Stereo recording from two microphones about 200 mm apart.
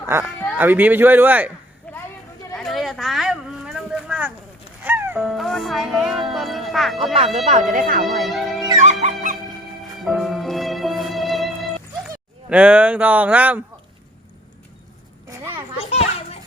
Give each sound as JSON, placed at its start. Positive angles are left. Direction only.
{"t": 0.0, "sound": "speech", "side_deg": -10}
{"t": 1.9, "sound": "a sound", "side_deg": 10}
{"t": 4.8, "sound": "music", "side_deg": -10}
{"t": 6.3, "sound": "speech", "side_deg": 0}
{"t": 7.3, "sound": "speech", "side_deg": -30}
{"t": 7.7, "sound": "speech", "side_deg": -45}
{"t": 8.0, "sound": "speech", "side_deg": 0}
{"t": 8.8, "sound": "music", "side_deg": -35}
{"t": 10.0, "sound": "music", "side_deg": 0}
{"t": 12.5, "sound": "speech", "side_deg": -5}
{"t": 15.8, "sound": "children playing", "side_deg": 30}